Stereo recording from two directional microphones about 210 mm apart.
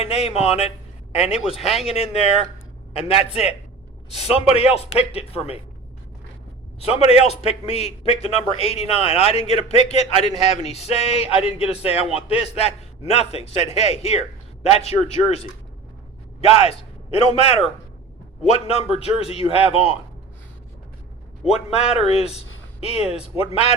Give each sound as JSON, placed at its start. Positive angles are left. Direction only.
{"t": 0.0, "sound": "a man's voice", "side_deg": 30}
{"t": 6.7, "sound": "a man's voice", "side_deg": 30}
{"t": 21.4, "sound": "speech", "side_deg": 30}